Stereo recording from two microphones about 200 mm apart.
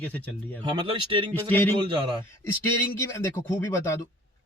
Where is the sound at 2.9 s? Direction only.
15° left (ahead or behind).